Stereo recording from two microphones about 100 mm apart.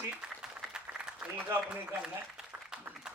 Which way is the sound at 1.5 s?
20° right (ahead or behind).